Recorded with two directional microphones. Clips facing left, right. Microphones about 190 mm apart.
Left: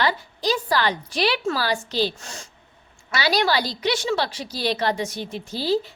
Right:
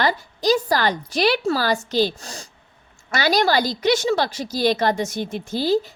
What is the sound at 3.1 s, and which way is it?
A woman's voice, 45° right (ahead or behind).